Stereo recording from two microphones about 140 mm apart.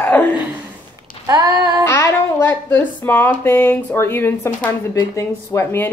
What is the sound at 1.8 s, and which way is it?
Speech, 20° left (ahead or behind).